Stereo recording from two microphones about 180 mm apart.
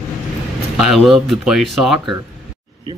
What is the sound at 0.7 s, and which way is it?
Speech, centre (ahead or behind).